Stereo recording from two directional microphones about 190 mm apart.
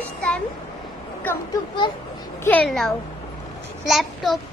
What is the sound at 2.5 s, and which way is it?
A child's voice, 5° left (ahead or behind).